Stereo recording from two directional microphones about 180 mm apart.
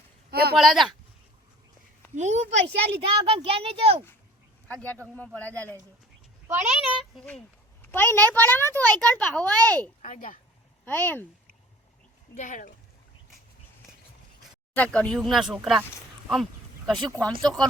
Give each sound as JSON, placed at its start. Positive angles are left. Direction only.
{"t": 0.3, "sound": "a sound", "side_deg": -60}
{"t": 0.5, "sound": "speech", "side_deg": 0}
{"t": 2.1, "sound": "a child's voice", "side_deg": -40}
{"t": 4.7, "sound": "a child's voice", "side_deg": 10}
{"t": 6.5, "sound": "a child's voice", "side_deg": -5}
{"t": 10.0, "sound": "speech", "side_deg": 45}
{"t": 10.8, "sound": "a child's voice", "side_deg": 10}
{"t": 12.4, "sound": "speech", "side_deg": 45}
{"t": 14.8, "sound": "speech", "side_deg": 5}
{"t": 16.3, "sound": "a sound", "side_deg": 0}
{"t": 17.1, "sound": "speech", "side_deg": 0}